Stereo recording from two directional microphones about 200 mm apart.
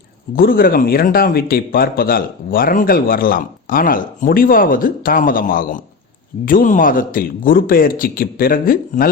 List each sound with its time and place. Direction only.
0.3 s speech: 45° left (ahead or behind)